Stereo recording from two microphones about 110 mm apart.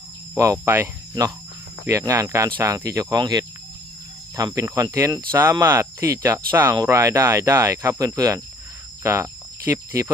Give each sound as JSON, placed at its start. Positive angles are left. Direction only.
{"t": 0.3, "sound": "speech", "side_deg": -30}
{"t": 1.9, "sound": "speech", "side_deg": -30}
{"t": 9.0, "sound": "cricket", "side_deg": -20}